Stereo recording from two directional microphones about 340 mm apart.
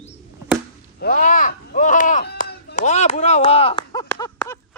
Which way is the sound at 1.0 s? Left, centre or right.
Left.